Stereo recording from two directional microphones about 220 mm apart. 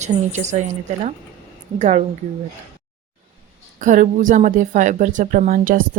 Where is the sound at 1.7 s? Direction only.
30° right (ahead or behind).